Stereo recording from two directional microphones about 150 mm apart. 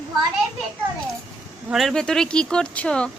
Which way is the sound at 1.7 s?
Centre (ahead or behind).